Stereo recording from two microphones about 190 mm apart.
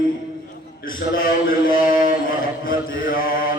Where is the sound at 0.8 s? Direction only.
50° left (ahead or behind).